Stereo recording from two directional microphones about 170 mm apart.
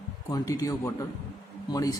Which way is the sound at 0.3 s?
20° left (ahead or behind).